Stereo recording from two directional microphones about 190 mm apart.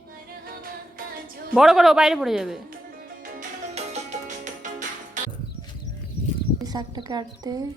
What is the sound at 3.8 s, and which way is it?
Music, 35° right (ahead or behind).